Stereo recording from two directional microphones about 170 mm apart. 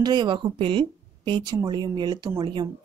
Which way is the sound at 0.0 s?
25° right (ahead or behind).